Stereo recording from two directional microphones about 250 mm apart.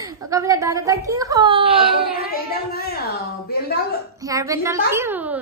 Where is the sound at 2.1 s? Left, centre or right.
Left.